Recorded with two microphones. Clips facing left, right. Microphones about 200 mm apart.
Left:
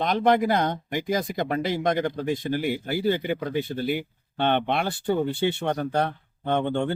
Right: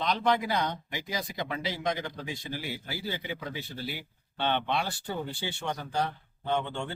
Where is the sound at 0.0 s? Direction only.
50° left (ahead or behind).